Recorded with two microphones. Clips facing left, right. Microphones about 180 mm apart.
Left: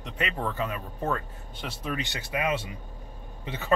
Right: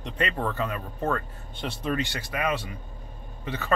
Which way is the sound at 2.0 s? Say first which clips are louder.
Right 1 dB; 20° left (ahead or behind).